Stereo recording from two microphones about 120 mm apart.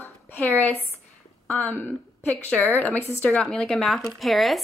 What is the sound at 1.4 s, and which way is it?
A woman's voice, 15° left (ahead or behind).